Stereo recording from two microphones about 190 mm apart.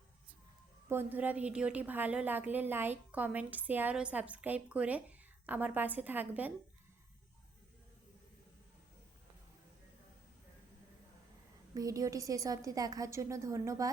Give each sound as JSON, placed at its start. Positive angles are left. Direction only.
{"t": 0.9, "sound": "a woman's voice", "side_deg": -10}
{"t": 11.7, "sound": "a woman's voice", "side_deg": -20}